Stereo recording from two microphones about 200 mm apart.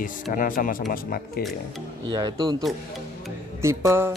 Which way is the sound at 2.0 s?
20° right (ahead or behind).